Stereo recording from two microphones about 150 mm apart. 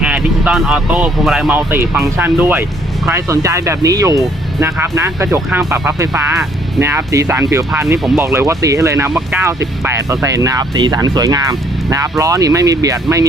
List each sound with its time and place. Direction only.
0.0 s speech: 5° right (ahead or behind)
7.9 s speech: centre (ahead or behind)
8.2 s speech: 20° right (ahead or behind)